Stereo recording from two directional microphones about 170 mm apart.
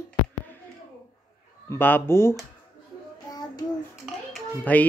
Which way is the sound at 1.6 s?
10° left (ahead or behind).